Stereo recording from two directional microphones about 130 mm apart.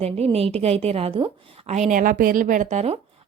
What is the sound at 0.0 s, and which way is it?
A woman's voice, 50° right (ahead or behind).